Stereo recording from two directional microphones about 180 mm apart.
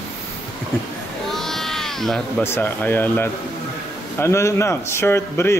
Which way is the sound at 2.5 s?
10° left (ahead or behind).